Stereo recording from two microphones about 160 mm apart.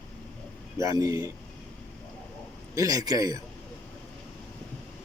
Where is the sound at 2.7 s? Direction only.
20° right (ahead or behind).